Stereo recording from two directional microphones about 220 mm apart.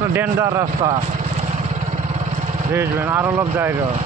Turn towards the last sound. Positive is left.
turn(degrees=-10)  # may be behind; listen again after turning